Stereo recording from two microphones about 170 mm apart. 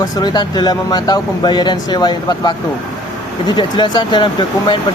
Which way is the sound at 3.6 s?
25° left (ahead or behind).